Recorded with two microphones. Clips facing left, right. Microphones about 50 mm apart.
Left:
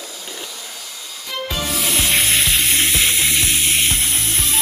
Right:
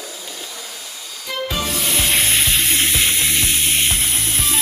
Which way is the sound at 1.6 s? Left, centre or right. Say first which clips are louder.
Left 4 dB; centre.